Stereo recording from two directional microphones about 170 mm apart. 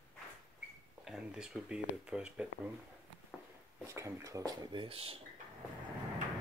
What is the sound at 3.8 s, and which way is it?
Speech, 15° right (ahead or behind).